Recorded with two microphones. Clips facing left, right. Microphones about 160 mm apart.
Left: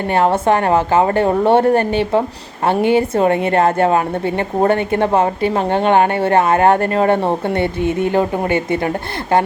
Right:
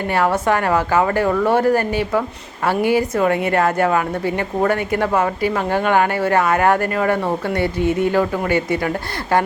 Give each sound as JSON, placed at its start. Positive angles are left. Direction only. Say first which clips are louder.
{"t": 0.1, "sound": "a woman's voice", "louder": "left 4 dB", "side_deg": 25}